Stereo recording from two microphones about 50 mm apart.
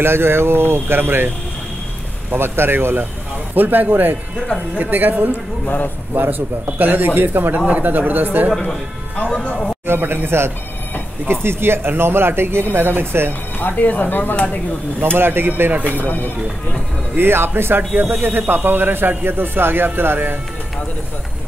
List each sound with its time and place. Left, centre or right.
0.0 s speech: right
2.3 s speech: right
9.8 s speech: right
13.6 s speech: left
15.0 s speech: right
15.8 s speech: left
17.2 s speech: right